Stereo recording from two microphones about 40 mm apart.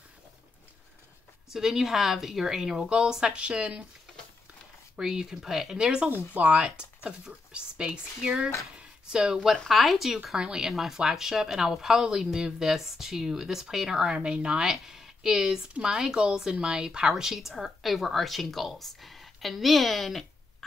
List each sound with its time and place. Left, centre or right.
1.5 s a woman's voice: centre; by 3.8 s right
4.9 s a woman's voice: centre
5.8 s speech: right
6.3 s speech: right
9.7 s speech: centre
10.3 s a woman's voice: centre
14.0 s speech: right
14.7 s speech: centre